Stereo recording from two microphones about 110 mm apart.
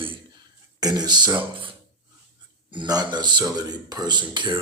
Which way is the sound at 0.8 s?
35° right (ahead or behind).